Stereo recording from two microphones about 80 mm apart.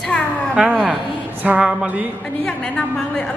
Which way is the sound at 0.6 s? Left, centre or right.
Centre.